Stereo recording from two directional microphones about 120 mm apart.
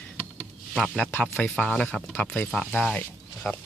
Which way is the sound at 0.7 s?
10° left (ahead or behind).